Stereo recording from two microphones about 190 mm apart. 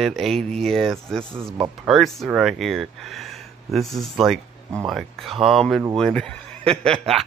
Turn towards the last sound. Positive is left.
turn(degrees=5)  # may be behind; listen again after turning